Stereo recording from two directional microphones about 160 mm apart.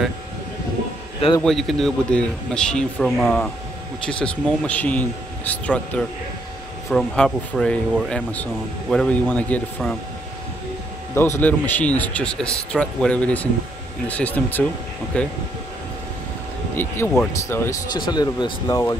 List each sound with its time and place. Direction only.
1.4 s a man's voice: centre (ahead or behind)
11.1 s speech: 15° left (ahead or behind)
16.7 s speech: 15° left (ahead or behind)